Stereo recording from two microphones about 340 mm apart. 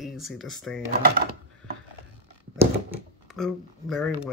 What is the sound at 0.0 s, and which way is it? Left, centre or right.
Speech, centre.